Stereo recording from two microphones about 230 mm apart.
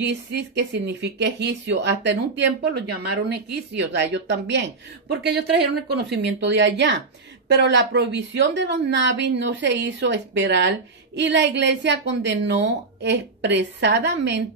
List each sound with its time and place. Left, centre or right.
0.0 s a woman's voice: right